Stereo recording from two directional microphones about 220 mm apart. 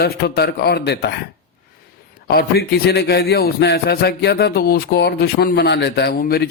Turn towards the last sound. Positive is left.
turn(degrees=45)  # may be behind; listen again after turning